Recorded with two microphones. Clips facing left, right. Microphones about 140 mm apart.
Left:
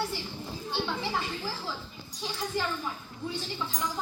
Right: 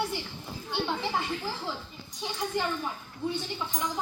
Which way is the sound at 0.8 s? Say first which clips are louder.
Right 2 dB; 20° right (ahead or behind).